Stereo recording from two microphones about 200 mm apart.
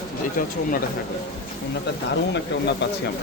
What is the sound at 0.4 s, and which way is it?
Speech, 45° left (ahead or behind).